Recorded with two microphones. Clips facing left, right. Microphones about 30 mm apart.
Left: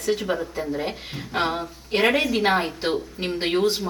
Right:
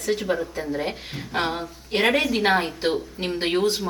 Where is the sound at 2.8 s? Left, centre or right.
Centre.